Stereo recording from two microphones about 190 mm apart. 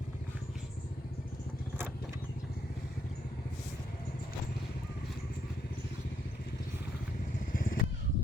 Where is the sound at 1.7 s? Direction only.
10° right (ahead or behind).